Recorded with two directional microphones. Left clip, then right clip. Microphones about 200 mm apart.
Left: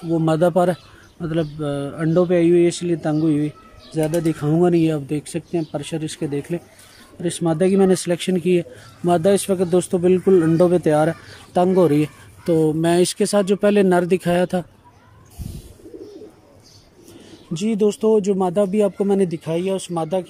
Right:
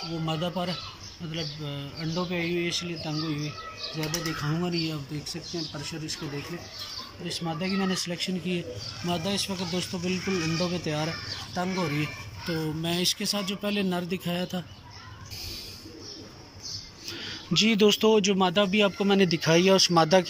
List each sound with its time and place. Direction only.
0.2 s speech: 65° left (ahead or behind); by 6.6 s 45° left (ahead or behind)
7.4 s speech: 60° left (ahead or behind)
17.6 s speech: 30° left (ahead or behind)